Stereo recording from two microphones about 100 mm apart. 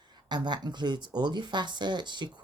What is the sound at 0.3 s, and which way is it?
Speech, 45° right (ahead or behind).